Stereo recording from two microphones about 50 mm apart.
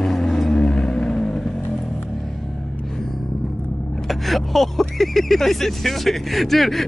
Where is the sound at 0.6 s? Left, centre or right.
Centre.